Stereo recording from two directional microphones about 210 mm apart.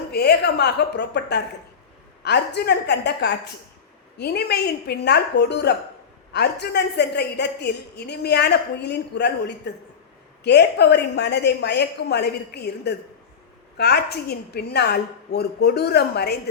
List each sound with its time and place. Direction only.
0.1 s a woman's voice: 50° left (ahead or behind)